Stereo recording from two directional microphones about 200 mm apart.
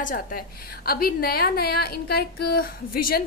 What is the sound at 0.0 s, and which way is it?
A woman's voice, 45° left (ahead or behind).